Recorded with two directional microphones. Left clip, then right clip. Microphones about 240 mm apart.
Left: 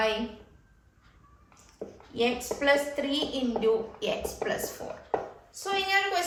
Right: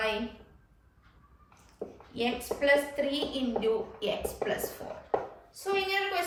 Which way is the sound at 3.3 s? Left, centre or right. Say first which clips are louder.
Left 3 dB; centre.